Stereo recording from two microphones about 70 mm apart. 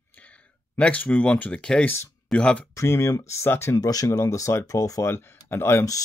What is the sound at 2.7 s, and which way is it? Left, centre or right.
Speech, left.